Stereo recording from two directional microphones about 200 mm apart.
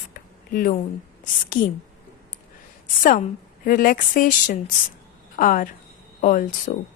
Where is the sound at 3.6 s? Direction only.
45° left (ahead or behind).